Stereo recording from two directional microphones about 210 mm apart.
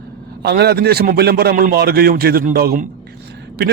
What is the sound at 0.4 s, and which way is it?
A man's voice, 50° right (ahead or behind).